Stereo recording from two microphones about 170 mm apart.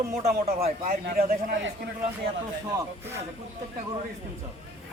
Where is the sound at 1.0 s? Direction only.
60° right (ahead or behind).